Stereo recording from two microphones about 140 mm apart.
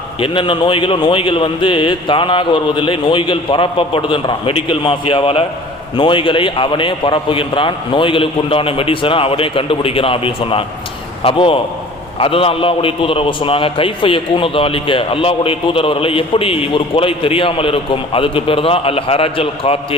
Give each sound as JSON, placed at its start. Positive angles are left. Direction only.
{"t": 0.2, "sound": "a man's voice", "side_deg": 35}